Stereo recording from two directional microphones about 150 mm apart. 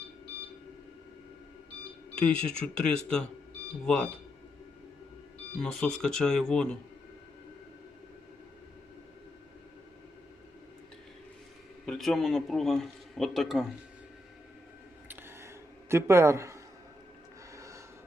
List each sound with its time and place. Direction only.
2.1 s speech: 5° left (ahead or behind)
5.5 s speech: 5° left (ahead or behind)
11.9 s speech: centre (ahead or behind)
15.0 s a sound: 15° right (ahead or behind)